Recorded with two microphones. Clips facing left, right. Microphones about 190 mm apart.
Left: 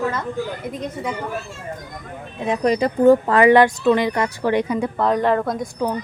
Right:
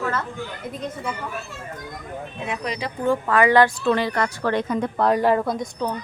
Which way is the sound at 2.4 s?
45° left (ahead or behind).